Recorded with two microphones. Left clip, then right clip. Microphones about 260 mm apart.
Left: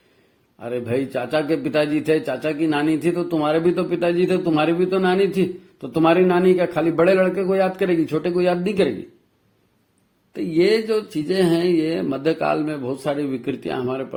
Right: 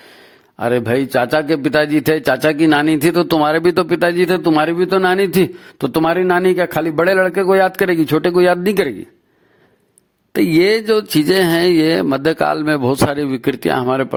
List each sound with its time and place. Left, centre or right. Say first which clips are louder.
0.6 s speech: right 8 dB; right
10.3 s speech: right 5 dB; right